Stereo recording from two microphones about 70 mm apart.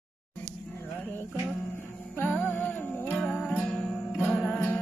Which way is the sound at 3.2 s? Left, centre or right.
Centre.